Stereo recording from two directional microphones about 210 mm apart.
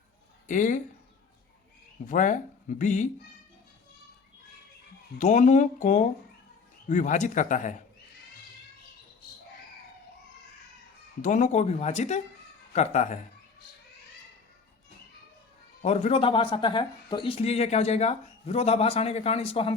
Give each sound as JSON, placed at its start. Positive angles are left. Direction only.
{"t": 0.4, "sound": "speech", "side_deg": 35}
{"t": 2.0, "sound": "speech", "side_deg": 35}
{"t": 5.2, "sound": "speech", "side_deg": 35}
{"t": 11.2, "sound": "speech", "side_deg": 35}
{"t": 15.8, "sound": "speech", "side_deg": 30}